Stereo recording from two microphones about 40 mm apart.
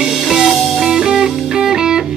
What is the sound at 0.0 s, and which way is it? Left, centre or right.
Music, centre.